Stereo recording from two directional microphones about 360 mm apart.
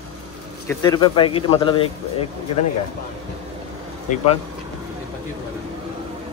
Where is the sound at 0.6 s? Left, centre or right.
Centre.